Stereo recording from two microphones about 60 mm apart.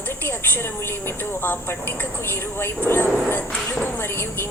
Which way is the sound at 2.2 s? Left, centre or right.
Left.